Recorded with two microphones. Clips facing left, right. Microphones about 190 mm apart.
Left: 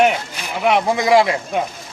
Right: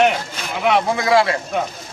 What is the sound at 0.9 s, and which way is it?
Speech, 15° left (ahead or behind).